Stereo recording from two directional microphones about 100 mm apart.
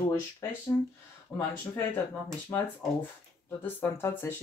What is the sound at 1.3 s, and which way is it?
Speech, 5° left (ahead or behind).